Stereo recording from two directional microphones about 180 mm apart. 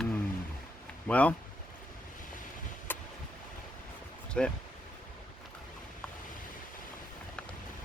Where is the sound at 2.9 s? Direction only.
10° left (ahead or behind).